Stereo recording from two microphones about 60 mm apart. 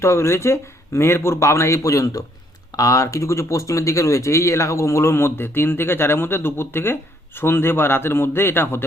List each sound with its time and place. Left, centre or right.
0.0 s speech: left